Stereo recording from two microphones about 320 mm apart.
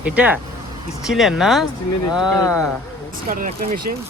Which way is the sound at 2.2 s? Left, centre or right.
Centre.